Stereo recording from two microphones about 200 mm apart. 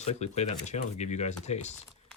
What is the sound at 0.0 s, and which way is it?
Speech, 35° left (ahead or behind).